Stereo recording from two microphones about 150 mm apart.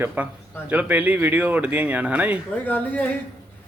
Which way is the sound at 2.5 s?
10° left (ahead or behind).